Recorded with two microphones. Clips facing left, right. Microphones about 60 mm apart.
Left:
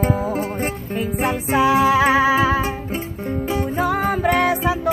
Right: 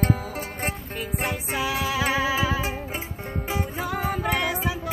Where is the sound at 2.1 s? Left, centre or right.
Left.